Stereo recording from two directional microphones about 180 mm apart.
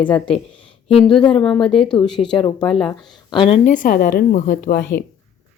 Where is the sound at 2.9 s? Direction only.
25° left (ahead or behind).